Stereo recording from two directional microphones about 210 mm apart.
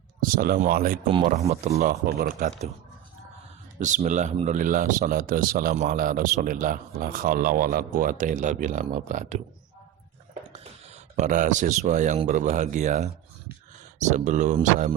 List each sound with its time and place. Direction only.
0.2 s speech: 40° right (ahead or behind)
1.5 s a man's voice: 30° right (ahead or behind)
1.9 s speech: 50° right (ahead or behind)
3.8 s a man's voice: 35° right (ahead or behind)
10.5 s a man's voice: 30° right (ahead or behind)